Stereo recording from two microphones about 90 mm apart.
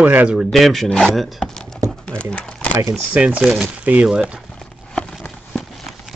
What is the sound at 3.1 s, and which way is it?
Speech, 15° right (ahead or behind).